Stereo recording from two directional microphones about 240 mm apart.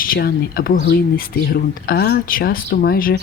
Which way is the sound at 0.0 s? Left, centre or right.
Left.